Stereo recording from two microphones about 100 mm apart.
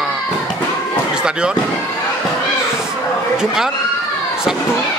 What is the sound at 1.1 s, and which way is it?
Speech, 10° right (ahead or behind).